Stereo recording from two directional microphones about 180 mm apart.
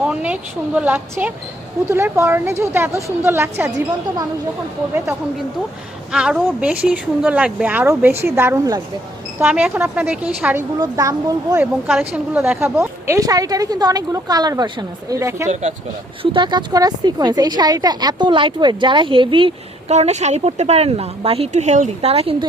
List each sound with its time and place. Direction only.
0.0 s speech: 5° right (ahead or behind)
6.1 s speech: 5° right (ahead or behind)
9.4 s speech: 5° right (ahead or behind)
10.8 s a woman's voice: 20° right (ahead or behind)
16.2 s a woman's voice: 25° right (ahead or behind)